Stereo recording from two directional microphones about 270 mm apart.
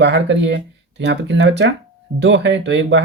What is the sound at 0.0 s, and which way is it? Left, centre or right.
Speech, right.